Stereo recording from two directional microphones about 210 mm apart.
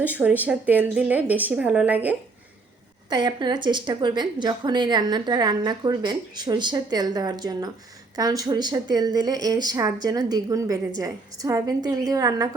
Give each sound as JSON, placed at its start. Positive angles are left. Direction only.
{"t": 0.0, "sound": "a woman's voice", "side_deg": -5}
{"t": 3.1, "sound": "a woman's voice", "side_deg": -20}